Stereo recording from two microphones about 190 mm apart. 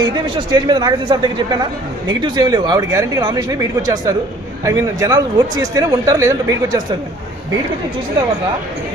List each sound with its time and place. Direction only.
0.0 s speech: 20° right (ahead or behind)